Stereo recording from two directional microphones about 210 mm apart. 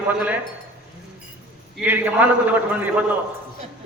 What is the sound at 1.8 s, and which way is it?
Music, 5° right (ahead or behind).